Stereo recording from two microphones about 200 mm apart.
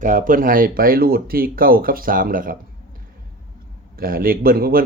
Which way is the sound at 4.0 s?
45° right (ahead or behind).